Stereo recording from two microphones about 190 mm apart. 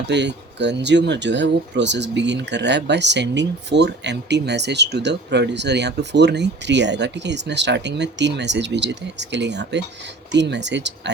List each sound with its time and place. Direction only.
0.1 s speech: 65° right (ahead or behind)